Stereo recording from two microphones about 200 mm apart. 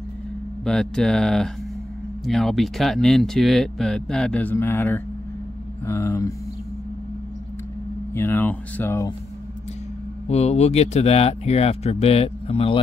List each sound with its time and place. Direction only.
0.7 s speech: 5° left (ahead or behind)
8.1 s speech: 10° left (ahead or behind)
10.2 s speech: 30° left (ahead or behind)